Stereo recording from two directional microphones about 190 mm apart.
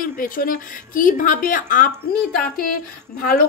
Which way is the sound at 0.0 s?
50° left (ahead or behind).